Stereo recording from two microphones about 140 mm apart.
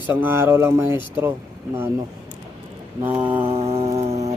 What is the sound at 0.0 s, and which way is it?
A man's voice, 15° right (ahead or behind).